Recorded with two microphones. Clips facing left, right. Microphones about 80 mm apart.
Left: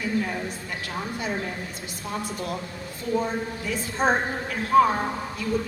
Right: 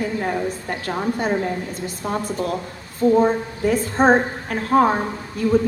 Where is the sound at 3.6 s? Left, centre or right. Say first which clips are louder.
Right 10 dB; right.